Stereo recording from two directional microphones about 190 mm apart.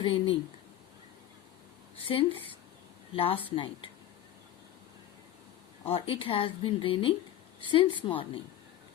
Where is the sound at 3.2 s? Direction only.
30° left (ahead or behind).